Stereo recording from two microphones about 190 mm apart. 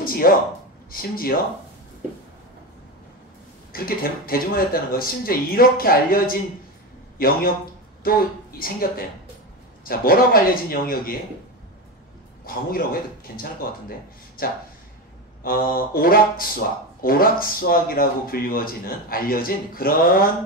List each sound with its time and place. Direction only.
0.0 s a sound: 50° left (ahead or behind)
0.9 s speech: 50° left (ahead or behind)
3.7 s a woman's voice: 50° left (ahead or behind)
12.4 s speech: 50° left (ahead or behind)